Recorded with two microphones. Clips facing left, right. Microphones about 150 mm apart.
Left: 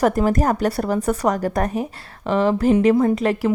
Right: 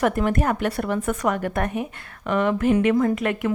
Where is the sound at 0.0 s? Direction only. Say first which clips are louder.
Left 3 dB; 35° left (ahead or behind).